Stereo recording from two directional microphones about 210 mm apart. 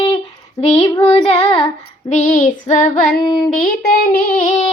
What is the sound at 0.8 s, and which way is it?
Child singing, 20° left (ahead or behind).